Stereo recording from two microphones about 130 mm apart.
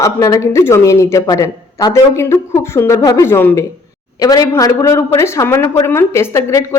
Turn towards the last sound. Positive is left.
turn(degrees=20)  # may be behind; listen again after turning